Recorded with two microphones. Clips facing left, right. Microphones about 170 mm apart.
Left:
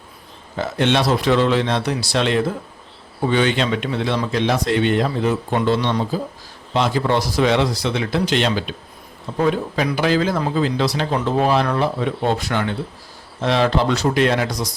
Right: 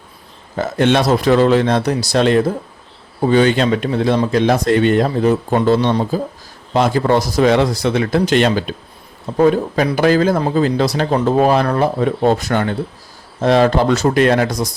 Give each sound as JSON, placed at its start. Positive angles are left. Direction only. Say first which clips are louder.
{"t": 0.5, "sound": "a man's voice", "louder": "right 4 dB", "side_deg": -45}